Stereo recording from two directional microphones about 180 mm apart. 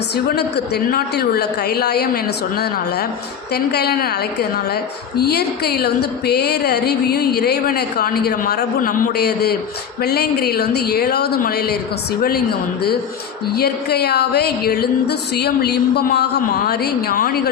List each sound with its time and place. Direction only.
0.3 s a woman's voice: 65° left (ahead or behind)
3.5 s a woman's voice: 60° left (ahead or behind)